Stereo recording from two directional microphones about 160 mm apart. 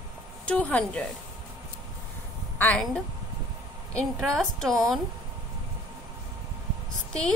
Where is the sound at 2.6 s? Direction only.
10° left (ahead or behind).